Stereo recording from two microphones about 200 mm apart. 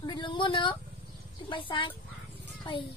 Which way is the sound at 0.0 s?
25° left (ahead or behind).